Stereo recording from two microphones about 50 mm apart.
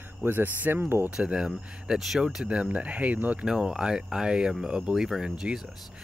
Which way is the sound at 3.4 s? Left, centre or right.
Centre.